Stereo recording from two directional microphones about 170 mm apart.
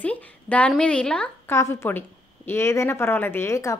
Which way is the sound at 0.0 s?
10° left (ahead or behind).